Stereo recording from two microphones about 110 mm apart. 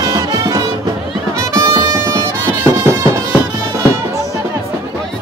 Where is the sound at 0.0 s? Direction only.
35° right (ahead or behind).